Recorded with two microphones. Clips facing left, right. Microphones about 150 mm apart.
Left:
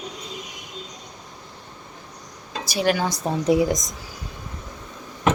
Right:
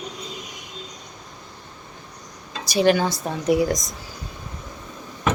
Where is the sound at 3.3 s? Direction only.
25° left (ahead or behind).